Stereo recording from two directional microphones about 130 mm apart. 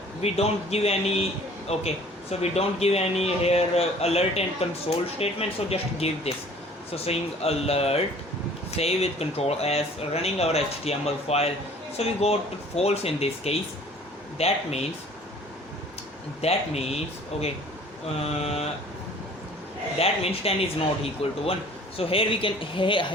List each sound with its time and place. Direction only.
0.2 s speech: 50° left (ahead or behind)
16.4 s speech: 50° left (ahead or behind)
18.2 s speech: 50° left (ahead or behind)
20.0 s speech: 50° left (ahead or behind)